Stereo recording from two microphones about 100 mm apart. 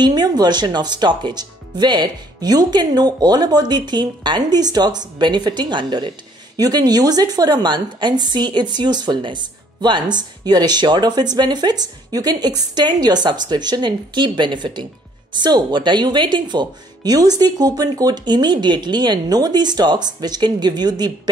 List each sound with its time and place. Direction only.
0.0 s speech: 45° right (ahead or behind)